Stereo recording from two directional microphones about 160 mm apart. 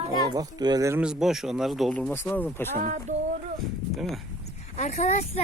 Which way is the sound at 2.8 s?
50° right (ahead or behind).